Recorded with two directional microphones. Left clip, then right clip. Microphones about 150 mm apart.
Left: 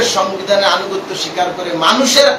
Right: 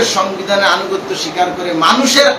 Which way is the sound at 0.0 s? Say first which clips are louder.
Even; 15° right (ahead or behind).